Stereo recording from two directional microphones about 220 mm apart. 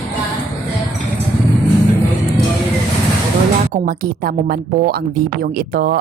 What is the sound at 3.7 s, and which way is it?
A woman's voice, 40° right (ahead or behind).